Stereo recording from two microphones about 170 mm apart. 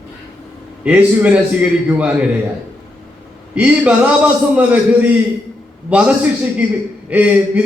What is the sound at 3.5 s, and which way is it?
Speech, 5° right (ahead or behind).